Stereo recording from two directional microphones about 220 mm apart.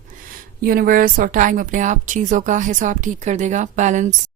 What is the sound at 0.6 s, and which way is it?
Speech, 40° right (ahead or behind).